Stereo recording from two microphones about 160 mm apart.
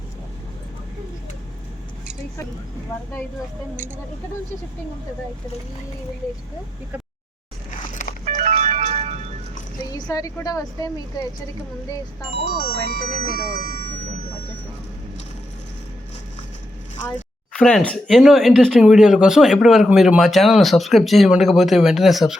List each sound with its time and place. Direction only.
8.2 s music: 50° right (ahead or behind)
9.9 s a woman's voice: 20° left (ahead or behind)
12.3 s speech: 65° right (ahead or behind)
17.5 s speech: 5° left (ahead or behind)